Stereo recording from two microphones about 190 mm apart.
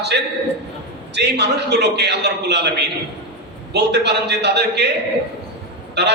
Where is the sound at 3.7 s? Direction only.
60° right (ahead or behind).